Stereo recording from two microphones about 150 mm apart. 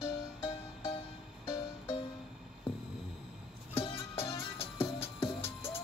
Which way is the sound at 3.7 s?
40° left (ahead or behind).